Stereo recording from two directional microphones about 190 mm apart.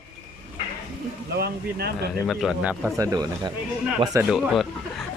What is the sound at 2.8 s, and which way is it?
Speech, 15° right (ahead or behind).